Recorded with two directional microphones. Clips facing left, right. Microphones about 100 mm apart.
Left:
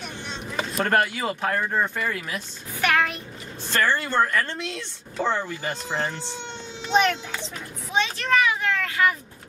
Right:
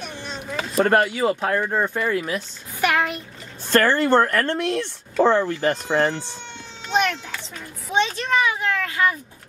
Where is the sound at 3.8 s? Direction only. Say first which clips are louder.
Right 3 dB; 50° right (ahead or behind).